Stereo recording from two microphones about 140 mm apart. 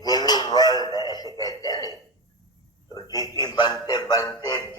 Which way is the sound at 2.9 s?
25° left (ahead or behind).